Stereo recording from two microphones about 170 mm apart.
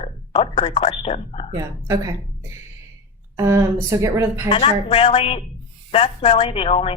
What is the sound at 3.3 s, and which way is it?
Speech, 15° right (ahead or behind).